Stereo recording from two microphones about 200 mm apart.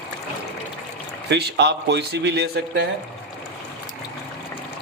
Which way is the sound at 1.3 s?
60° right (ahead or behind).